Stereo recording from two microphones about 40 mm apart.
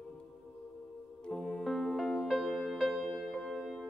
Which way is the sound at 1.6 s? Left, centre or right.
Centre.